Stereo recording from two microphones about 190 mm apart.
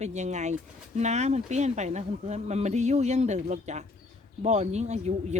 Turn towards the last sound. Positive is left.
turn(degrees=-35)  # may be behind; listen again after turning